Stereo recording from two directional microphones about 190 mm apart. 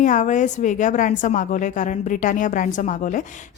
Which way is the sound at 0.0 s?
40° left (ahead or behind).